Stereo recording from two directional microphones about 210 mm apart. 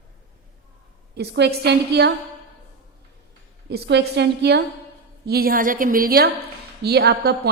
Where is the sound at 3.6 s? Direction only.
55° right (ahead or behind).